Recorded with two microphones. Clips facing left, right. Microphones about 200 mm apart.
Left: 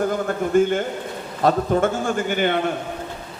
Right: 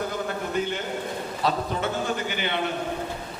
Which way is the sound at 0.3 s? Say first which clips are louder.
Left 9 dB; 50° left (ahead or behind).